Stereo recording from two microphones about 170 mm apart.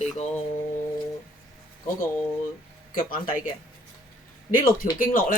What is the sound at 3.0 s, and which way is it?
Speech, 55° left (ahead or behind).